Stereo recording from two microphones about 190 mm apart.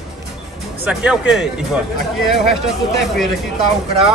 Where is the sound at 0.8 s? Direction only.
5° right (ahead or behind).